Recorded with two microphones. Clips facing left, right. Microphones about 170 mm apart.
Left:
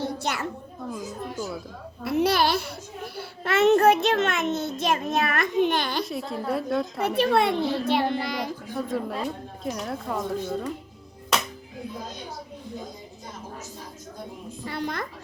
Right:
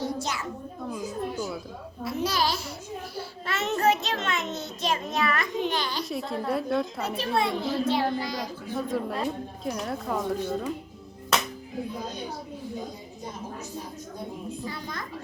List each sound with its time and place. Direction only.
0.0 s a sound: 65° left (ahead or behind)
0.9 s a woman's voice: centre (ahead or behind)
2.0 s a child's voice: 60° left (ahead or behind)
6.1 s a woman's voice: centre (ahead or behind)
7.2 s a child's voice: 65° left (ahead or behind)
8.9 s a woman's voice: centre (ahead or behind)
14.7 s a woman's voice: 65° left (ahead or behind)